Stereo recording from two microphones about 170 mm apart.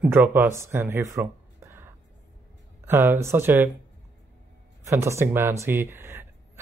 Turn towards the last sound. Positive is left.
turn(degrees=-15)  # may be behind; listen again after turning